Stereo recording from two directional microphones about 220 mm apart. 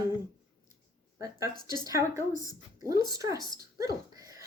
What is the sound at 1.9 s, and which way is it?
Speech, 15° right (ahead or behind).